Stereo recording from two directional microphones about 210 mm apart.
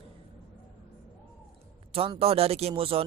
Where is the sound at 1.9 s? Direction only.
25° right (ahead or behind).